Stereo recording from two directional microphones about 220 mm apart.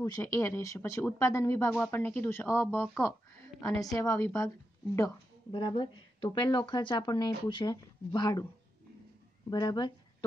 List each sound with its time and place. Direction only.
0.0 s speech: 15° left (ahead or behind)
9.5 s speech: 20° left (ahead or behind)